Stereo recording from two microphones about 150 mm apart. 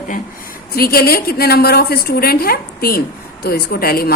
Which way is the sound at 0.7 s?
90° left.